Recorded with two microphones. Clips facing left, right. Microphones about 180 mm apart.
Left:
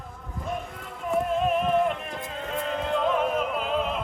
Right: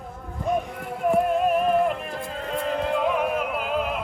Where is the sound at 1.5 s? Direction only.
5° right (ahead or behind).